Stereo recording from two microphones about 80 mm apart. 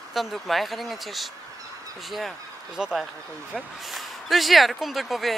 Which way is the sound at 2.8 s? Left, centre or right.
Centre.